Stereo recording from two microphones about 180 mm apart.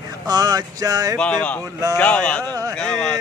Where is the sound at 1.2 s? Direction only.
5° left (ahead or behind).